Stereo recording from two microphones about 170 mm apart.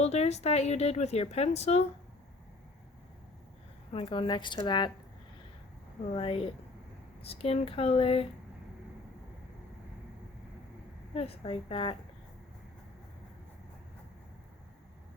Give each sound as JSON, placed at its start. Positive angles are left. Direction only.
{"t": 0.0, "sound": "a woman's voice", "side_deg": 40}
{"t": 3.9, "sound": "a woman's voice", "side_deg": 30}
{"t": 6.1, "sound": "a woman's voice", "side_deg": 35}
{"t": 11.1, "sound": "a woman's voice", "side_deg": 35}